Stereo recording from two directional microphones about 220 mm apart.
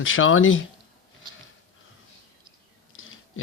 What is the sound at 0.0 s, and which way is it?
Speech, 65° left (ahead or behind).